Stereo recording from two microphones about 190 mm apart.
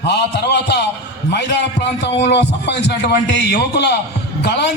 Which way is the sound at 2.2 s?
60° left (ahead or behind).